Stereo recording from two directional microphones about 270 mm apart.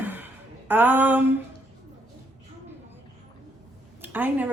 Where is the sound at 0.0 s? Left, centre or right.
Centre.